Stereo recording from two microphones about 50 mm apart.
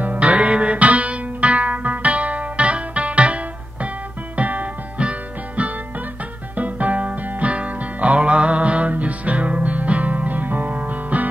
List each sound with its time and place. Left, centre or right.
0.0 s music: right
4.4 s music: right
6.5 s music: right